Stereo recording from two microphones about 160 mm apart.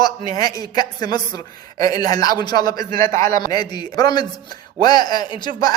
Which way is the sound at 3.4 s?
25° left (ahead or behind).